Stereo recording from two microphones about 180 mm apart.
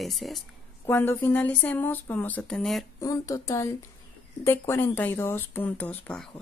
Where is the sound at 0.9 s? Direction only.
10° left (ahead or behind).